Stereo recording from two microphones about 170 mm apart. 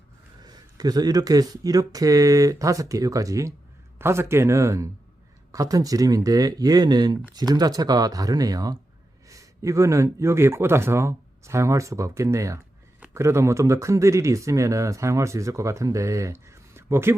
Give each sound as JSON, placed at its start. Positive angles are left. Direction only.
{"t": 0.4, "sound": "speech", "side_deg": -25}